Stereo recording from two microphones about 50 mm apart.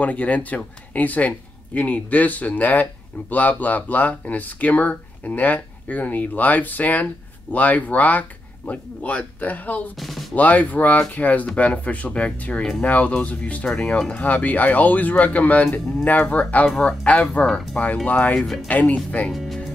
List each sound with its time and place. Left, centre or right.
0.0 s speech: left
9.9 s speech: centre
10.3 s speech: left
13.7 s speech: centre
14.1 s speech: left
16.6 s speech: centre